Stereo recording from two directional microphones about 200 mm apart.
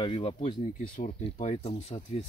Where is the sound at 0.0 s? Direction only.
25° left (ahead or behind).